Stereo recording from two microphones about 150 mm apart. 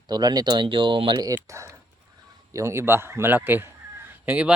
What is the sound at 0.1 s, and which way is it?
Speech, 25° right (ahead or behind).